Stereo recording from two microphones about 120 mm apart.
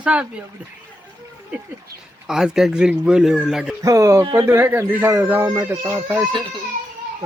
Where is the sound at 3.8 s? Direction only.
25° right (ahead or behind).